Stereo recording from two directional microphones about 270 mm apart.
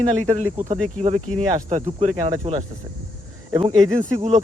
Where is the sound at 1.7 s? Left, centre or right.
Right.